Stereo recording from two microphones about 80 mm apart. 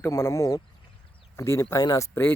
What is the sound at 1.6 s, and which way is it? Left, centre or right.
Speech, left.